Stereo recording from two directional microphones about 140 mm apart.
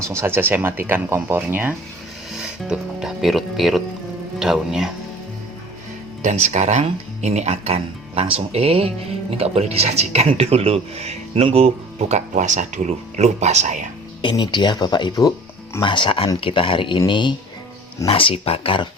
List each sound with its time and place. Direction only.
0.0 s speech: 20° right (ahead or behind)
2.6 s speech: 5° right (ahead or behind)
6.2 s speech: 60° right (ahead or behind)
14.2 s speech: 35° left (ahead or behind)